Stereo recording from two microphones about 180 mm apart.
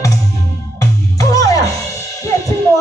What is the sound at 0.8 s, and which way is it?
Music, 20° left (ahead or behind).